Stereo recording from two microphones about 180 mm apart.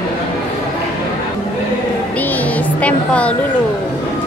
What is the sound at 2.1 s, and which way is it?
Music, 10° left (ahead or behind).